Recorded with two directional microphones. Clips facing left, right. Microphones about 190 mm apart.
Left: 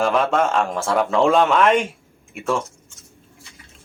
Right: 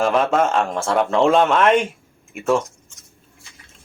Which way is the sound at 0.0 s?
Centre (ahead or behind).